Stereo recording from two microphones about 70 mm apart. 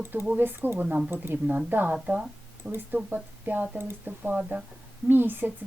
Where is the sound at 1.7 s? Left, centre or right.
Right.